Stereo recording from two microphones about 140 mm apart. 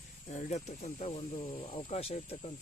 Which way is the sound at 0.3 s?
60° left (ahead or behind).